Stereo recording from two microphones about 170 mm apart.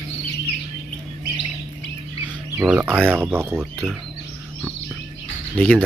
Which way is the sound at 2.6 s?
10° right (ahead or behind).